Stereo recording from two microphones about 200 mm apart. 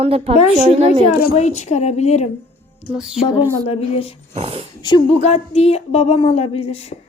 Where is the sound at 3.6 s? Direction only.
30° left (ahead or behind).